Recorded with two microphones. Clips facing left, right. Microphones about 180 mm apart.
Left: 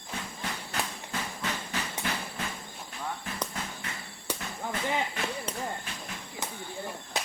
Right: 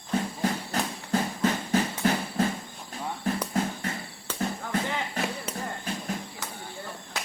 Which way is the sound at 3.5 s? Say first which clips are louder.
Right 10 dB; 40° right (ahead or behind).